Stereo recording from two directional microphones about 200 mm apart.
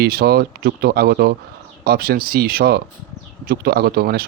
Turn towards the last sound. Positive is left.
turn(degrees=-50)  # may be behind; listen again after turning